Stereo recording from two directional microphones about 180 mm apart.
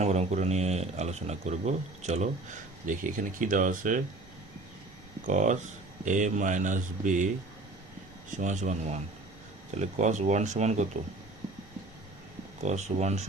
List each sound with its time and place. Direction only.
0.0 s speech: 40° right (ahead or behind)
5.2 s speech: 40° right (ahead or behind)
8.4 s speech: 40° right (ahead or behind)
12.6 s speech: 40° right (ahead or behind)